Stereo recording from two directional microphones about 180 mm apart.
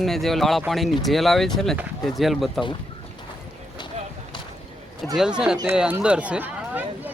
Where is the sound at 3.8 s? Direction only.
25° left (ahead or behind).